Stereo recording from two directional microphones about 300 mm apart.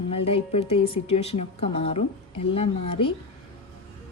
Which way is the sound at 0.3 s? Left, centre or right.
Centre.